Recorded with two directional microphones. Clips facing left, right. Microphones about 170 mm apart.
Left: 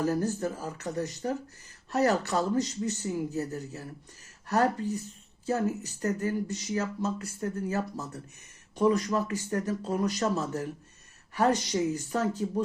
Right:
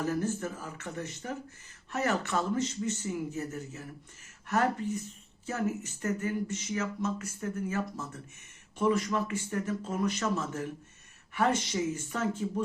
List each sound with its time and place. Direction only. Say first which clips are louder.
0.0 s speech: left 3 dB; 35° left (ahead or behind)